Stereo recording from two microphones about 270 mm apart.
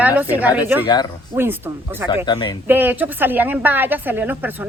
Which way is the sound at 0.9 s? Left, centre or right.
Centre.